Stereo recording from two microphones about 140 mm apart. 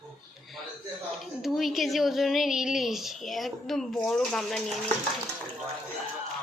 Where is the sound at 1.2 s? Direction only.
Centre (ahead or behind).